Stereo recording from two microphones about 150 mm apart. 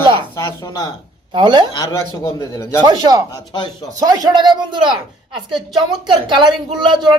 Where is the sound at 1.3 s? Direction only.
30° right (ahead or behind).